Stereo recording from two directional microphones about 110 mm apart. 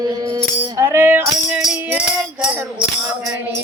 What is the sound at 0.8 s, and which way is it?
Music, 20° right (ahead or behind).